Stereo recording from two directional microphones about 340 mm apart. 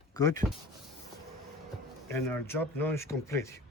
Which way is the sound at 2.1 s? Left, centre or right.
Centre.